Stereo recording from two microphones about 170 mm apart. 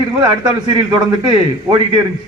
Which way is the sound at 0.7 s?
25° right (ahead or behind).